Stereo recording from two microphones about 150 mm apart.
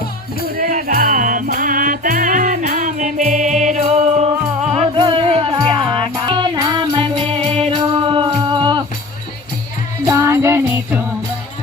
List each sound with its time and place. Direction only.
0.4 s music: 75° right (ahead or behind); by 8.8 s 35° right (ahead or behind)
10.1 s music: 20° right (ahead or behind)